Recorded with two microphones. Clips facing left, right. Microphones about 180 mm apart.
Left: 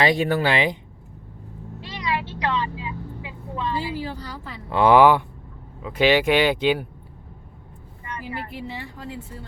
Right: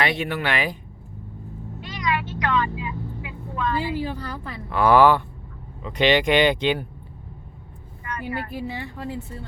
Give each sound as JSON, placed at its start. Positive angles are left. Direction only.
{"t": 0.0, "sound": "speech", "side_deg": 35}
{"t": 1.8, "sound": "vehicle", "side_deg": 30}
{"t": 4.7, "sound": "speech", "side_deg": 25}
{"t": 4.9, "sound": "speech", "side_deg": 15}
{"t": 8.0, "sound": "vehicle", "side_deg": 25}